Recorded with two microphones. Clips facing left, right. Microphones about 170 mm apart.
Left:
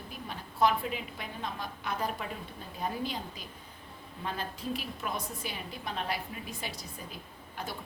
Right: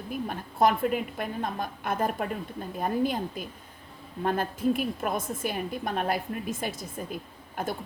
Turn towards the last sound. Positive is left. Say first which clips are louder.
# right 8 dB
turn(degrees=-50)  # may be behind; listen again after turning